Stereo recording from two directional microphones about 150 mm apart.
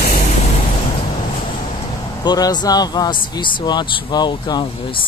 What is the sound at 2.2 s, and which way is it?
Speech, 25° left (ahead or behind).